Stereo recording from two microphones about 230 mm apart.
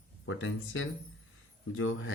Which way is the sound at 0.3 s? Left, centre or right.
Left.